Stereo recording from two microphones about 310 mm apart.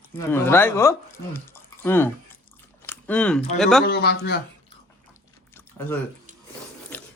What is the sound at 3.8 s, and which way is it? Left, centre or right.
Speech, left.